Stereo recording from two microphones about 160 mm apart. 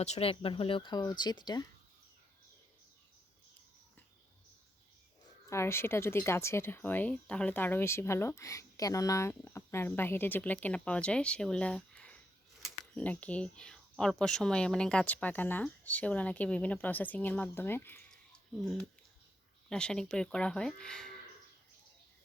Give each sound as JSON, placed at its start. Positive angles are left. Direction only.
{"t": 0.0, "sound": "speech", "side_deg": 40}
{"t": 5.5, "sound": "speech", "side_deg": 15}
{"t": 19.7, "sound": "speech", "side_deg": 5}